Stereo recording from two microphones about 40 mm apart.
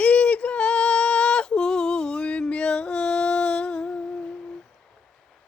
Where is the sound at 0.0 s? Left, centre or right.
Left.